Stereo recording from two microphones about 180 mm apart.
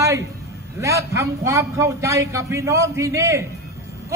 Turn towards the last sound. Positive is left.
turn(degrees=-15)  # may be behind; listen again after turning